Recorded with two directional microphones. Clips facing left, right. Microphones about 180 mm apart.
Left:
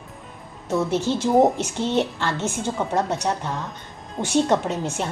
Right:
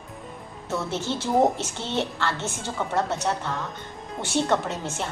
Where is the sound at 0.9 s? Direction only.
15° left (ahead or behind).